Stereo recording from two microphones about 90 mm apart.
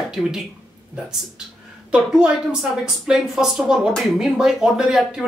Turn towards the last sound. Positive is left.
turn(degrees=-5)  # may be behind; listen again after turning